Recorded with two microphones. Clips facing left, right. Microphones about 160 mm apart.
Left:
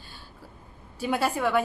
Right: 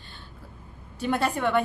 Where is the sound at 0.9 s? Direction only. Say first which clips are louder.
Even; 5° left (ahead or behind).